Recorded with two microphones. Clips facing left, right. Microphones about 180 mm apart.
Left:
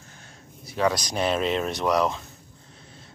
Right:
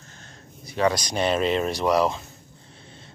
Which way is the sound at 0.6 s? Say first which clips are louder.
Right 1 dB; centre (ahead or behind).